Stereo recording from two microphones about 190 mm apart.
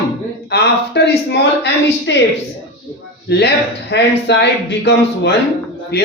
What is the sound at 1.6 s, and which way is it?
Speech, 65° left (ahead or behind).